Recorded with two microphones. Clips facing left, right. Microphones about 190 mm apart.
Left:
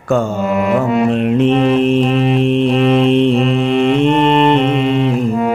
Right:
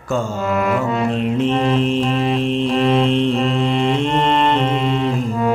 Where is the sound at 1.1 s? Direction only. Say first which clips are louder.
Left 5 dB; 65° left (ahead or behind).